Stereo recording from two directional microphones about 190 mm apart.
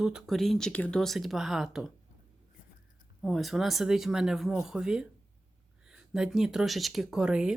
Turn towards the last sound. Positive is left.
turn(degrees=-5)  # may be behind; listen again after turning